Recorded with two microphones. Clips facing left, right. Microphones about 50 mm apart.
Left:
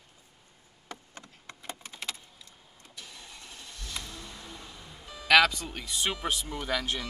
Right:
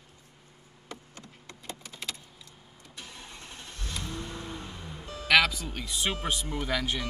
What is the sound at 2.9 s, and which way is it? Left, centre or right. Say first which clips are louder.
Vehicle: right 2 dB; right.